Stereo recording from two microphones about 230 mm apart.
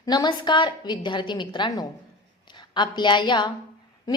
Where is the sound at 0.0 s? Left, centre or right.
Centre.